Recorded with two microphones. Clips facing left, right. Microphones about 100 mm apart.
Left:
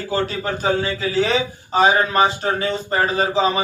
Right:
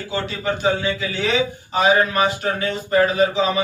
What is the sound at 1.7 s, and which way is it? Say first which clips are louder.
Speech: left 1 dB; 35° left (ahead or behind).